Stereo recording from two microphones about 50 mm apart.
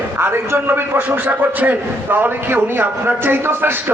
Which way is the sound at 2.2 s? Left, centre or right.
Right.